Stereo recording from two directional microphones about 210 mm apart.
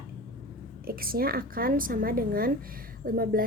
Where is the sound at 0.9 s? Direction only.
45° right (ahead or behind).